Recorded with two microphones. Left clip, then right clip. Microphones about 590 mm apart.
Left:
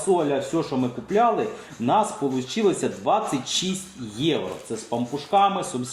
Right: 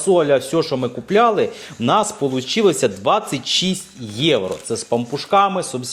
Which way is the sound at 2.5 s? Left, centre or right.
Right.